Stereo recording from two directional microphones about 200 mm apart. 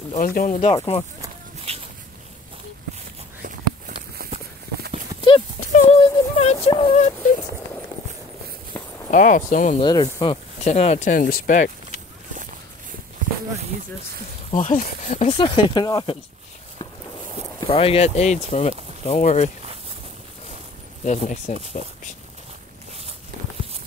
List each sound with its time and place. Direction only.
0.1 s speech: 45° left (ahead or behind)
1.7 s a sound: 30° right (ahead or behind)
5.7 s a sound: 35° left (ahead or behind)
9.1 s speech: 40° left (ahead or behind)
9.8 s speech: 20° left (ahead or behind)
10.6 s speech: 35° left (ahead or behind)
14.5 s speech: 40° left (ahead or behind)
15.2 s speech: 25° left (ahead or behind)
17.6 s speech: 30° left (ahead or behind)
21.0 s speech: 35° left (ahead or behind)